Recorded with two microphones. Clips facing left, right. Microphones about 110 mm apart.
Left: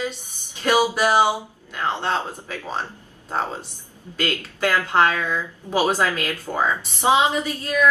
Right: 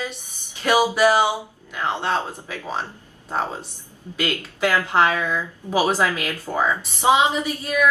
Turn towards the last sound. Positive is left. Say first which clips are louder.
# even
turn(degrees=-15)  # may be behind; listen again after turning